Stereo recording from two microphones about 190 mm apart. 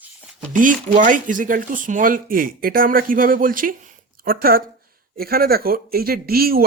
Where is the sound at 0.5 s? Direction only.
45° right (ahead or behind).